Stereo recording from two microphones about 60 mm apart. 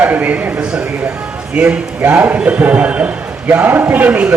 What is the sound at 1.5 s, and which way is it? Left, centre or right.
A man's voice, right.